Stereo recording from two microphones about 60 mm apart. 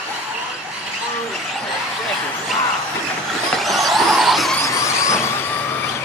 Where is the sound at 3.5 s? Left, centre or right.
Centre.